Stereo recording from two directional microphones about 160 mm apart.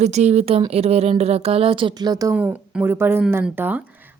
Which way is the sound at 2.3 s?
10° right (ahead or behind).